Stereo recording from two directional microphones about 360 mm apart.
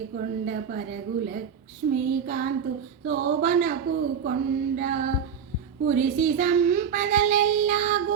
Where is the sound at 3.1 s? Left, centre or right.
Right.